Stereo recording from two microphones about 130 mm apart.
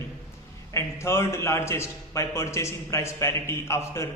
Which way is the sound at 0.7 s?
20° left (ahead or behind).